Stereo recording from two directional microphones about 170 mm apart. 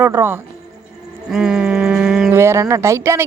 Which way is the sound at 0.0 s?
15° right (ahead or behind).